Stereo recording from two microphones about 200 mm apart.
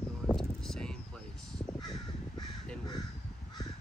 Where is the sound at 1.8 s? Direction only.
20° left (ahead or behind).